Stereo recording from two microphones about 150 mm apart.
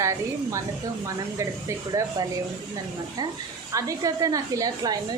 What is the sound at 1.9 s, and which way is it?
Speech, 20° right (ahead or behind).